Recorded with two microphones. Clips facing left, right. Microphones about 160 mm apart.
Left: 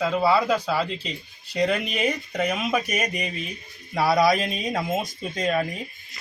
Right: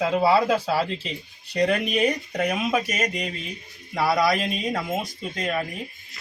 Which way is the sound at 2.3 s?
10° right (ahead or behind).